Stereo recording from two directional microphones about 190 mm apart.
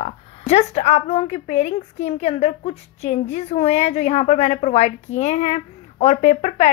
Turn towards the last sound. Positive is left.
turn(degrees=35)  # may be behind; listen again after turning